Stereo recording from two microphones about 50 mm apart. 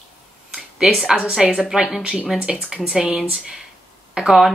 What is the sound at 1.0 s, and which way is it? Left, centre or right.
Speech, centre.